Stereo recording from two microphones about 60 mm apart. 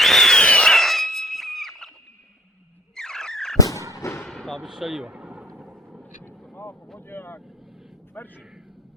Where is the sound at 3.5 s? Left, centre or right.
Left.